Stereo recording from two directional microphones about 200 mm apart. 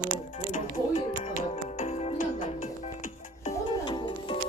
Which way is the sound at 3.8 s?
25° left (ahead or behind).